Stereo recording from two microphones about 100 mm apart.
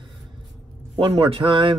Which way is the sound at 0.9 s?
70° right (ahead or behind).